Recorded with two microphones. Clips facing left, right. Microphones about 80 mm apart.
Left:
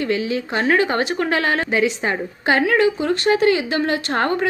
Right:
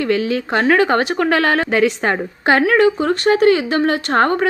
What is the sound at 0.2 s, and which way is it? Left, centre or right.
Speech, left.